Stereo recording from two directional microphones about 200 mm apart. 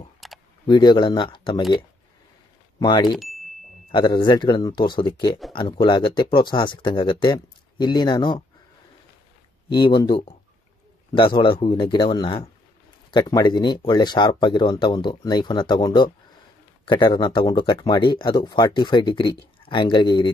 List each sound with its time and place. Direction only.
0.2 s a sound: centre (ahead or behind)
0.7 s speech: 20° left (ahead or behind)
2.8 s speech: 20° left (ahead or behind)
3.2 s a sound: centre (ahead or behind)
3.9 s speech: 20° left (ahead or behind)
9.7 s speech: 25° left (ahead or behind)
11.1 s speech: 25° left (ahead or behind)